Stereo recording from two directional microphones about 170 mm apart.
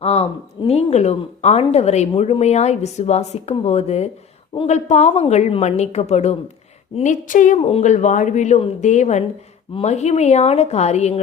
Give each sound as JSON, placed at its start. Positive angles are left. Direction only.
{"t": 0.0, "sound": "a woman's voice", "side_deg": 40}